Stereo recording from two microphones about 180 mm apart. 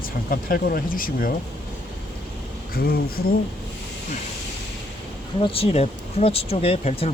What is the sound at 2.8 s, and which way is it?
Speech, 55° left (ahead or behind).